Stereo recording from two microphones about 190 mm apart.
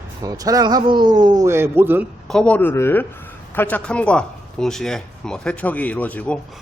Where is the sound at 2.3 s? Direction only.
5° left (ahead or behind).